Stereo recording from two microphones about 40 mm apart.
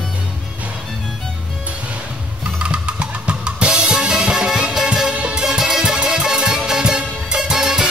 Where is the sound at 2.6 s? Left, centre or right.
Right.